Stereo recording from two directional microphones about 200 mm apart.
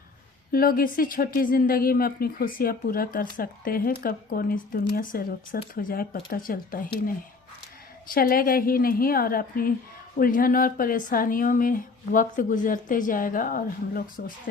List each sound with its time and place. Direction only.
0.5 s speech: 45° left (ahead or behind)
8.1 s speech: 45° left (ahead or behind)